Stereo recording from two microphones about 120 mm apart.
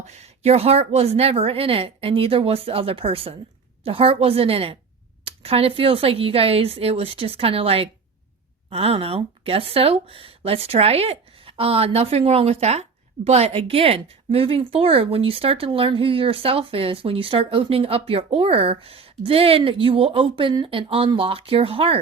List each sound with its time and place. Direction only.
0.0 s speech: 65° right (ahead or behind)